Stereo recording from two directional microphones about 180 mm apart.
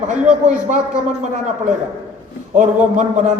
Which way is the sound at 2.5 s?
45° right (ahead or behind).